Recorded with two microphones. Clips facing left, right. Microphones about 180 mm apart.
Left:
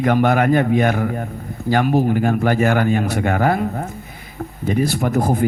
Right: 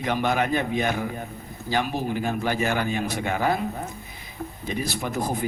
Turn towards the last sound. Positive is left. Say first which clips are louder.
# left 9 dB
turn(degrees=50)  # may be behind; listen again after turning